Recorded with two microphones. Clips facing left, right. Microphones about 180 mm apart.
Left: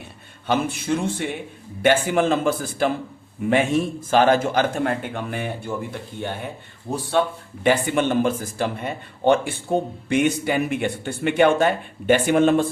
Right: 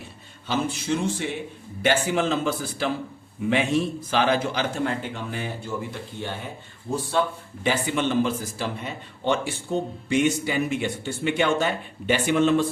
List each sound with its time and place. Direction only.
0.4 s a man's voice: 55° left (ahead or behind)
6.9 s speech: 60° left (ahead or behind)